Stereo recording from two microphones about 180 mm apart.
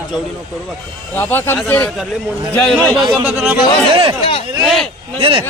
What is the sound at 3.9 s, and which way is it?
Speech, 30° right (ahead or behind).